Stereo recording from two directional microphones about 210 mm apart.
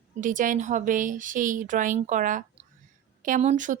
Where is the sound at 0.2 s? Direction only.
40° right (ahead or behind).